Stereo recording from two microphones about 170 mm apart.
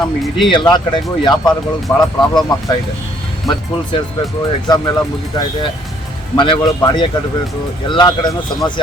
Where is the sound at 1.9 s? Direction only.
15° left (ahead or behind).